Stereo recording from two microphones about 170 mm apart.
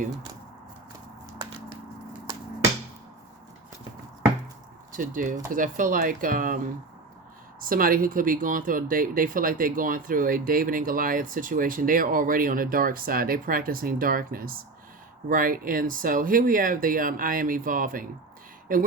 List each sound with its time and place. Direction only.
4.9 s speech: 50° right (ahead or behind)
7.6 s speech: 55° right (ahead or behind)